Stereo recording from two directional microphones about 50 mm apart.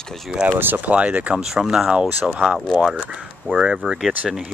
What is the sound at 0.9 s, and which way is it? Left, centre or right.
Speech, right.